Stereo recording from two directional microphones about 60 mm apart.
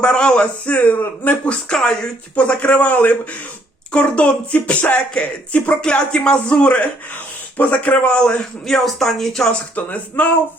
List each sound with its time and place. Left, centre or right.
0.0 s a man's voice: centre
1.5 s speech: centre
2.3 s a man's voice: left
5.5 s a man's voice: left
5.8 s a man's voice: centre
8.6 s speech: centre
9.5 s a man's voice: left